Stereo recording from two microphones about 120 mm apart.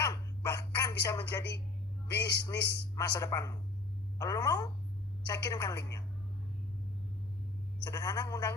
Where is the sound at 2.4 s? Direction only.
30° left (ahead or behind).